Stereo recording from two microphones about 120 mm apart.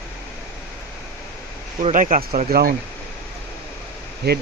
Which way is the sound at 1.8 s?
90° right.